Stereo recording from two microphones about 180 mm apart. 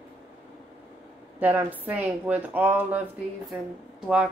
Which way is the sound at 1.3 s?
10° right (ahead or behind).